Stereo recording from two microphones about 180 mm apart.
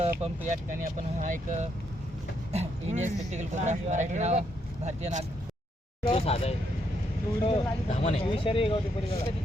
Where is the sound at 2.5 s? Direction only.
35° right (ahead or behind).